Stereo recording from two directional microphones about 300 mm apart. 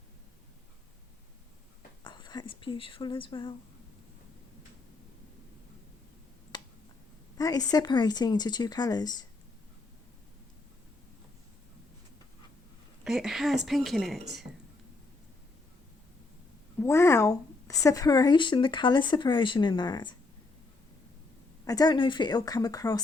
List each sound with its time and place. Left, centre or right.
2.0 s speech: centre
6.5 s a sound: centre
7.3 s speech: centre
13.1 s a woman's voice: centre
16.8 s speech: centre
21.6 s speech: centre